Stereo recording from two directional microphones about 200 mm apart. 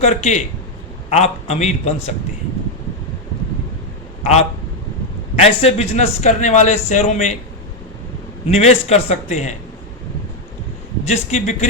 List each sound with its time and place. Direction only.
0.0 s a man's voice: 35° left (ahead or behind)
5.4 s a man's voice: 30° left (ahead or behind)
8.4 s a man's voice: 30° left (ahead or behind)
11.0 s a man's voice: 35° left (ahead or behind)